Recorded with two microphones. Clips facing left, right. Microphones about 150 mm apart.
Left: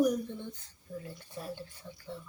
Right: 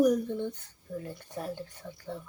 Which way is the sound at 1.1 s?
55° right (ahead or behind).